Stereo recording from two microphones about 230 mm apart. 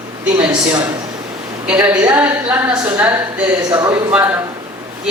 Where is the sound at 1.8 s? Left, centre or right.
Centre.